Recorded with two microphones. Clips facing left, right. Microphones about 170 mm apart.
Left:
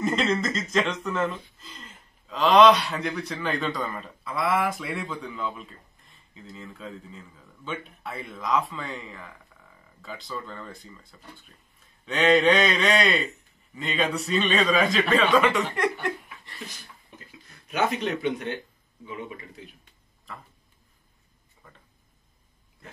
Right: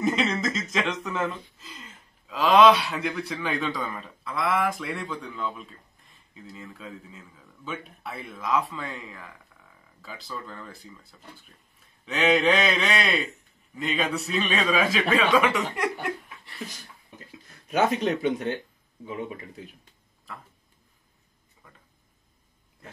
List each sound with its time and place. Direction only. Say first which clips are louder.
0.0 s speech: even; centre (ahead or behind)
17.6 s speech: right 3 dB; 40° right (ahead or behind)